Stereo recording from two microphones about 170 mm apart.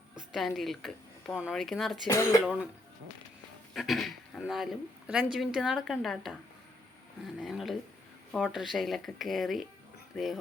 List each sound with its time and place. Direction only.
0.3 s speech: centre (ahead or behind)
2.0 s speech: 15° left (ahead or behind)
3.8 s speech: centre (ahead or behind)
7.3 s speech: centre (ahead or behind)